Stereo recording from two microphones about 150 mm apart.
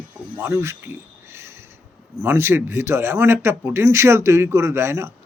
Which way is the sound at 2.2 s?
15° right (ahead or behind).